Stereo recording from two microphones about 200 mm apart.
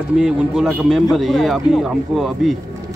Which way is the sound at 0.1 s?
5° right (ahead or behind).